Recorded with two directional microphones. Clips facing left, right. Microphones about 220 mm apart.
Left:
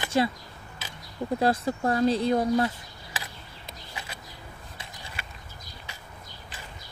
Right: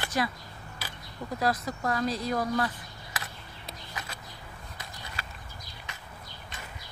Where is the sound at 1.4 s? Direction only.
30° left (ahead or behind).